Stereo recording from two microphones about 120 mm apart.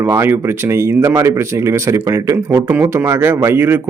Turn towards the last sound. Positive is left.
turn(degrees=-20)  # may be behind; listen again after turning